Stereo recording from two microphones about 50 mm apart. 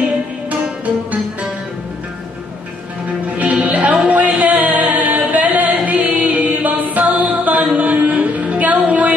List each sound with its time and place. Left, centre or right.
3.3 s music: right